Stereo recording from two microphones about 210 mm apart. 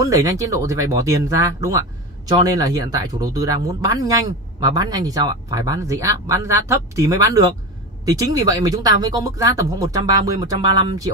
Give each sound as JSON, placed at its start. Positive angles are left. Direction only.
{"t": 0.0, "sound": "speech", "side_deg": -15}